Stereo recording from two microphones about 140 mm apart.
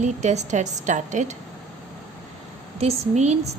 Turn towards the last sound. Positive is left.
turn(degrees=-50)  # may be behind; listen again after turning